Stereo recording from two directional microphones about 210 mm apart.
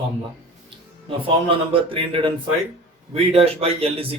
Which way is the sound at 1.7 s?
25° right (ahead or behind).